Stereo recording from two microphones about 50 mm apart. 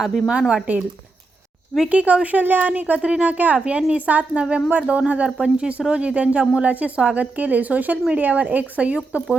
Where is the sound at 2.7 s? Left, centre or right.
Right.